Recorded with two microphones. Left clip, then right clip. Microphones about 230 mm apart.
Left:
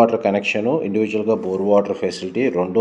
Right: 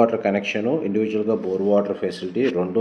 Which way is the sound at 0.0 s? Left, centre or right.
Left.